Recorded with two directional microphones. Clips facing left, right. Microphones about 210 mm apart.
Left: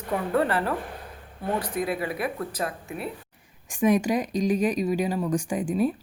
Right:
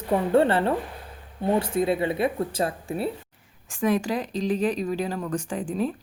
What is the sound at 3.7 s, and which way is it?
Speech, 15° left (ahead or behind).